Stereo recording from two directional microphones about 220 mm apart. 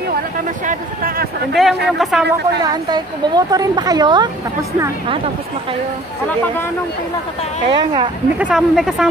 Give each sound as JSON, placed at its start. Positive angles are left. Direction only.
{"t": 0.7, "sound": "speech", "side_deg": -40}
{"t": 1.5, "sound": "speech", "side_deg": 0}
{"t": 2.6, "sound": "a woman's voice", "side_deg": -20}
{"t": 7.6, "sound": "a woman's voice", "side_deg": -20}
{"t": 8.4, "sound": "speech", "side_deg": -5}